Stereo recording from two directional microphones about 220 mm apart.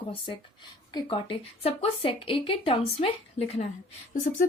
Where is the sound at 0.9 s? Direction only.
25° left (ahead or behind).